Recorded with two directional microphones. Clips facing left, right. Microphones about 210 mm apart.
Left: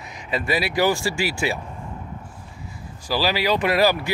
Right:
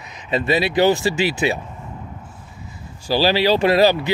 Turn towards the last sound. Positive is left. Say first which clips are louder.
# right 4 dB
turn(degrees=-25)  # may be behind; listen again after turning